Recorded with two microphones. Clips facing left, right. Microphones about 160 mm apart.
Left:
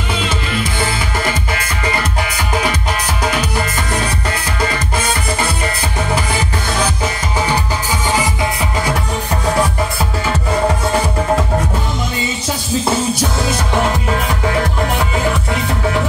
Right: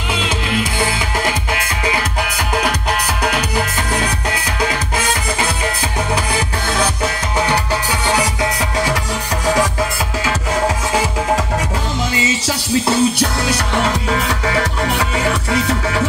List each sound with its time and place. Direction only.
12.2 s music: 85° right